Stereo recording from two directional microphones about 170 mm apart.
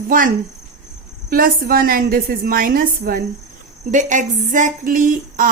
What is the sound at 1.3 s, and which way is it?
A woman's voice, 60° right (ahead or behind).